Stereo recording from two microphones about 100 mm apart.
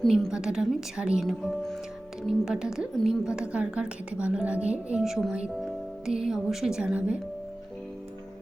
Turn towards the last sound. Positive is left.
turn(degrees=-10)  # may be behind; listen again after turning